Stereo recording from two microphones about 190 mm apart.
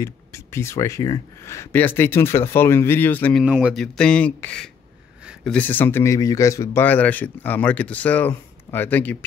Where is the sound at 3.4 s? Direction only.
5° right (ahead or behind).